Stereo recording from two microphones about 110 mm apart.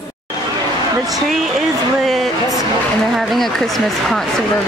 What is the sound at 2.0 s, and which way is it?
Speech, centre (ahead or behind).